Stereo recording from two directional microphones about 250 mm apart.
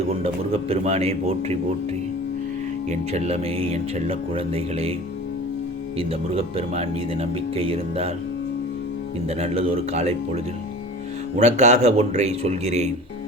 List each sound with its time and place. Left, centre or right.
0.1 s speech: right
2.9 s speech: right
6.0 s speech: right
9.4 s speech: right
11.3 s speech: right